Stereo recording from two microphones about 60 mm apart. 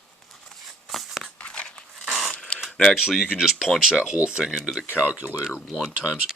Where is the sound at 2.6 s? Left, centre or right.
Centre.